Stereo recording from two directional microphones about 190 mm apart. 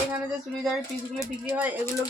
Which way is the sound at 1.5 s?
10° right (ahead or behind).